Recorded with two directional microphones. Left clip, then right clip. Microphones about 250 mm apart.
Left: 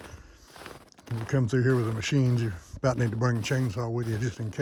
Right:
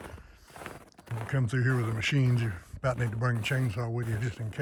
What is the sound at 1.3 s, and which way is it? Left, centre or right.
Speech, centre.